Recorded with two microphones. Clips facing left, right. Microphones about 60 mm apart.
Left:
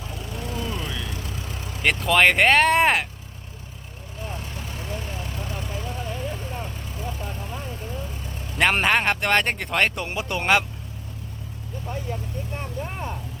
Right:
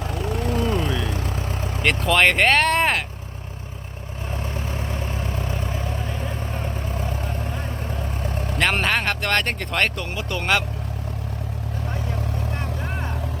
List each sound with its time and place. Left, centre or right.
0.1 s a sound: right
0.9 s vehicle: right
1.8 s speech: centre
4.4 s vehicle: right
8.5 s speech: centre